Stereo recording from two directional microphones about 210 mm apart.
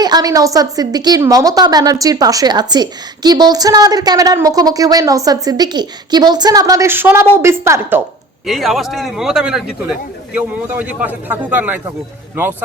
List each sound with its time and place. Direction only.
0.0 s a woman's voice: 20° right (ahead or behind)
8.4 s a man's voice: centre (ahead or behind)